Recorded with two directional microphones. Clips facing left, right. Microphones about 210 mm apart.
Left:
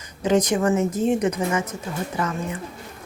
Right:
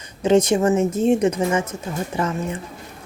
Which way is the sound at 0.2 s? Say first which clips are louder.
Right 4 dB; 25° right (ahead or behind).